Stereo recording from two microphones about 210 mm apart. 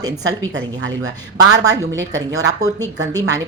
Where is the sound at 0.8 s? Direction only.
85° right.